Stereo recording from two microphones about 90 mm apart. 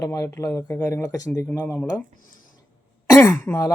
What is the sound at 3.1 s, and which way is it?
Speech, 35° left (ahead or behind).